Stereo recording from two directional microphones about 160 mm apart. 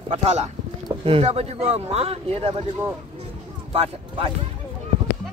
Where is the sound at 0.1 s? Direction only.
40° right (ahead or behind).